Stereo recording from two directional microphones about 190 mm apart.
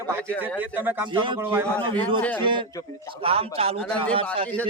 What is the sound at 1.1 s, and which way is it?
Speech, 25° right (ahead or behind).